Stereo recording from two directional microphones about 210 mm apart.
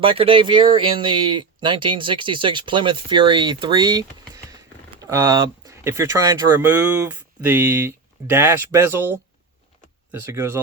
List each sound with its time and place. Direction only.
0.0 s speech: 25° right (ahead or behind)
5.0 s speech: 15° right (ahead or behind)